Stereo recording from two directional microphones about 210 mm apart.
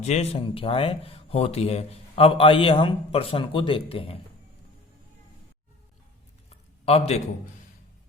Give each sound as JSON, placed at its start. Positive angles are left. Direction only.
{"t": 0.0, "sound": "speech", "side_deg": 30}
{"t": 6.8, "sound": "speech", "side_deg": 30}